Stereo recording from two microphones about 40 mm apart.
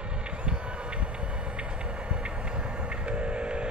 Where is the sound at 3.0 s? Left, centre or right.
Right.